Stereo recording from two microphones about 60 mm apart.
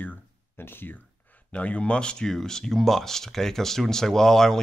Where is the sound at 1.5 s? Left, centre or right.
Left.